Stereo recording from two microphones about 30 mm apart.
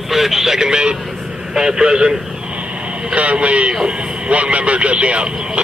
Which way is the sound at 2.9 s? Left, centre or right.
Right.